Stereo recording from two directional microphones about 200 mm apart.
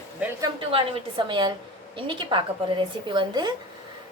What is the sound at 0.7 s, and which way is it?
A woman's voice, 25° right (ahead or behind).